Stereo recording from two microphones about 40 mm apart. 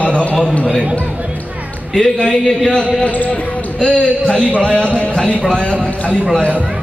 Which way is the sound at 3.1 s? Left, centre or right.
Left.